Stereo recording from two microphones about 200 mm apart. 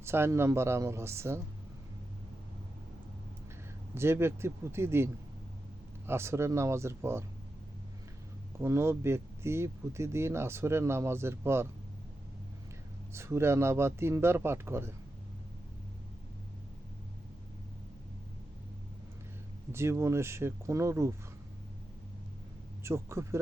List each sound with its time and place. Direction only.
0.0 s speech: 10° right (ahead or behind)
3.9 s speech: 10° right (ahead or behind)
6.1 s speech: 15° right (ahead or behind)
8.5 s speech: 15° right (ahead or behind)
13.1 s speech: 15° right (ahead or behind)
19.7 s speech: 15° right (ahead or behind)
22.8 s speech: 15° right (ahead or behind)